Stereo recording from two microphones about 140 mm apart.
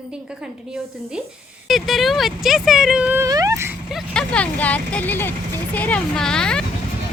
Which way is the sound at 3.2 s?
25° right (ahead or behind).